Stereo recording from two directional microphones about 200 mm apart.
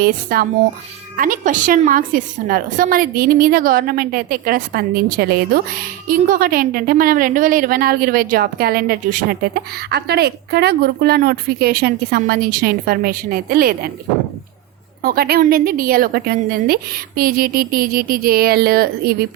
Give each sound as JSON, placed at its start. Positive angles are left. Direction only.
{"t": 0.0, "sound": "a woman's voice", "side_deg": -50}
{"t": 15.0, "sound": "a woman's voice", "side_deg": -50}